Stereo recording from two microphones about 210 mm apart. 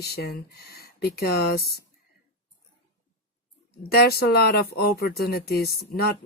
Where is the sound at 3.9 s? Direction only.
50° left (ahead or behind).